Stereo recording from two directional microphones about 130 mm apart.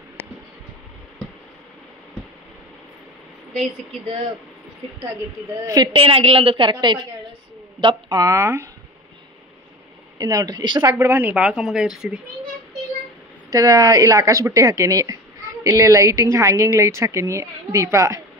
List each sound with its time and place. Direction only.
0.2 s a sound: 15° left (ahead or behind)
5.9 s a woman's voice: 45° right (ahead or behind); by 8.6 s 20° right (ahead or behind)
10.1 s a woman's voice: 30° right (ahead or behind)
11.0 s speech: 20° right (ahead or behind)
13.5 s a woman's voice: 25° right (ahead or behind)